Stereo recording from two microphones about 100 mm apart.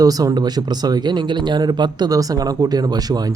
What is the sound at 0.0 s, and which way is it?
Speech, 40° right (ahead or behind).